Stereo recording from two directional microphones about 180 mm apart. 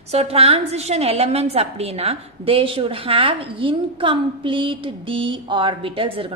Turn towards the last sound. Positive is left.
turn(degrees=-30)  # may be behind; listen again after turning